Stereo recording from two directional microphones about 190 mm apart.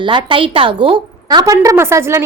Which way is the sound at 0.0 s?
25° right (ahead or behind).